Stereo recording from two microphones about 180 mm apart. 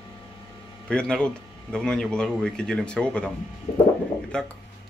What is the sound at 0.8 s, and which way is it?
Speech, 5° left (ahead or behind).